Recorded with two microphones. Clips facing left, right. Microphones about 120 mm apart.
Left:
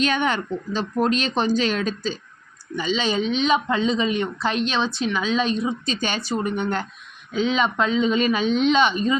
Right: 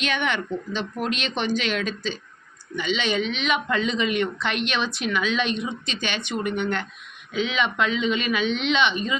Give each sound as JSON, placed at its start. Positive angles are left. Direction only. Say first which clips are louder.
{"t": 0.0, "sound": "speech", "louder": "left 4 dB", "side_deg": 40}